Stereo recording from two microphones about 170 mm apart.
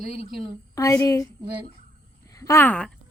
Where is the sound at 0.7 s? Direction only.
20° left (ahead or behind).